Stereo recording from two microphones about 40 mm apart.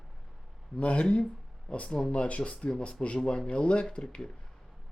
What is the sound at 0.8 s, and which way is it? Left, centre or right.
Speech, left.